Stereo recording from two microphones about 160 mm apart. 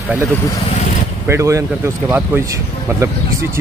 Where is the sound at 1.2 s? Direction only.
15° right (ahead or behind).